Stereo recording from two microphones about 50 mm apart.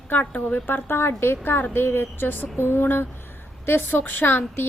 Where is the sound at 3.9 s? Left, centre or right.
Left.